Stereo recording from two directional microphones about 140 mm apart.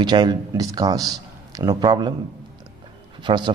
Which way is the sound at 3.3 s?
35° right (ahead or behind).